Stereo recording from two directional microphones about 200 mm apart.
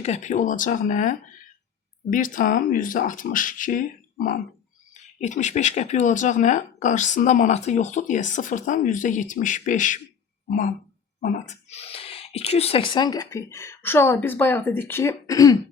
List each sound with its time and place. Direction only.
0.0 s a woman's voice: 35° left (ahead or behind)
11.2 s speech: 35° left (ahead or behind); by 15.5 s 15° left (ahead or behind)